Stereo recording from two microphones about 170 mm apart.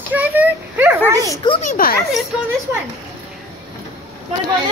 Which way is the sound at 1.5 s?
50° left (ahead or behind).